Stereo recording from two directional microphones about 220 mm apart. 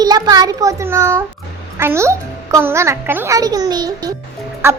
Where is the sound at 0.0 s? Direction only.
15° right (ahead or behind).